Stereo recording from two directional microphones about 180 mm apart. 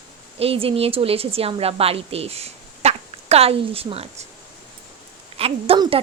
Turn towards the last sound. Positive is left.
turn(degrees=-25)  # may be behind; listen again after turning